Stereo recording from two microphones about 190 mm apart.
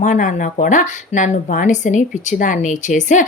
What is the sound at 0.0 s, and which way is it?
Speech, 40° left (ahead or behind).